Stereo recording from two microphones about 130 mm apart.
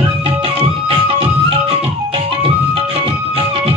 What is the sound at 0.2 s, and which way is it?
Music, 45° right (ahead or behind).